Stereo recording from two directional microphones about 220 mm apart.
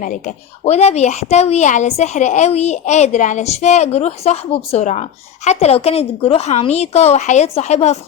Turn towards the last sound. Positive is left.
turn(degrees=30)  # may be behind; listen again after turning